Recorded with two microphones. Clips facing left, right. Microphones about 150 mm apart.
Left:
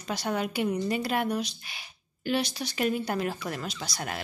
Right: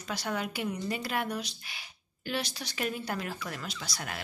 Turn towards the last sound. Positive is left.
turn(degrees=30)  # may be behind; listen again after turning